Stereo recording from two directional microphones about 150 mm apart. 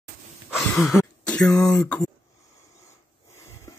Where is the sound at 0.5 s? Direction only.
Centre (ahead or behind).